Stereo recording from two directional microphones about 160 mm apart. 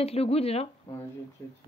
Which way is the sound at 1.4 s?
15° left (ahead or behind).